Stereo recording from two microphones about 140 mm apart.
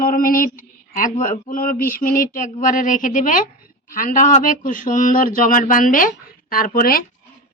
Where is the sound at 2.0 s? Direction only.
80° left.